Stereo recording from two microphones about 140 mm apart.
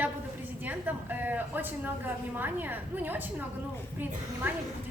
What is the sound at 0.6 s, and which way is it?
A woman's voice, 15° right (ahead or behind).